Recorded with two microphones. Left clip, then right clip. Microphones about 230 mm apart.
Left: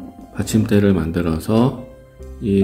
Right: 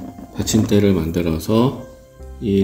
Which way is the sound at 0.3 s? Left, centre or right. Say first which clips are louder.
Right 1 dB; centre.